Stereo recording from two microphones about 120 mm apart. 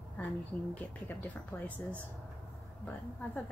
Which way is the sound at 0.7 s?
15° left (ahead or behind).